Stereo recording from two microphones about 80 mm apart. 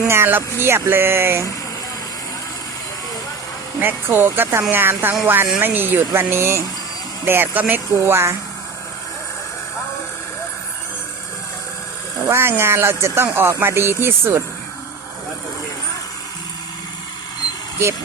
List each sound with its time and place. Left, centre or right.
0.0 s speech: right
3.8 s speech: right
7.9 s speech: right
12.3 s speech: right